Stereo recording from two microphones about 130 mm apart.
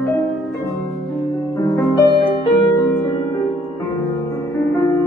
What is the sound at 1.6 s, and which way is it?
Music, 30° left (ahead or behind).